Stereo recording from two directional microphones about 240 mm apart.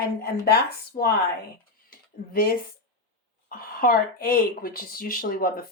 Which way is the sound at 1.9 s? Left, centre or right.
Left.